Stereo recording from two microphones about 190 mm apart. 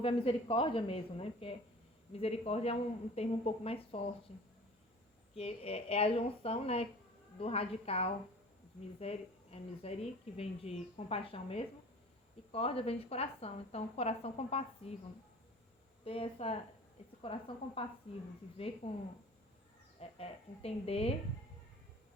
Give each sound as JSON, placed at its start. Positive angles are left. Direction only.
{"t": 0.0, "sound": "speech", "side_deg": 30}
{"t": 5.4, "sound": "speech", "side_deg": 30}
{"t": 16.0, "sound": "speech", "side_deg": 30}
{"t": 18.8, "sound": "speech", "side_deg": 30}